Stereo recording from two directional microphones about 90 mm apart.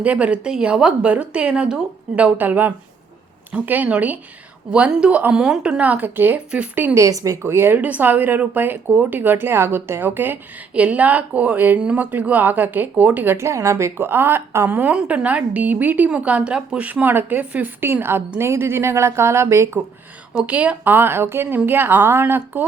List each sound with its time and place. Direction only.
0.0 s a woman's voice: 15° right (ahead or behind)
6.9 s a woman's voice: 35° right (ahead or behind)
20.3 s speech: 15° right (ahead or behind)